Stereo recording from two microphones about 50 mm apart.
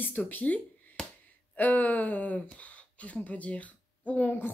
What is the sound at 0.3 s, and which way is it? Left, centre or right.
Speech, left.